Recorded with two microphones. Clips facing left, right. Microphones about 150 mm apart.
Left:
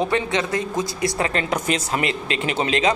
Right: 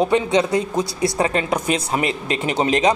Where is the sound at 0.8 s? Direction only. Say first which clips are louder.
Right 3 dB; 30° right (ahead or behind).